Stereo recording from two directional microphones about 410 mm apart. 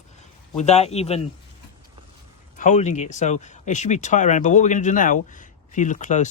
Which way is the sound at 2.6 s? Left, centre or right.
Centre.